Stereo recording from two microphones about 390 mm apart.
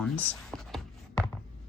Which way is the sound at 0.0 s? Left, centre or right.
Centre.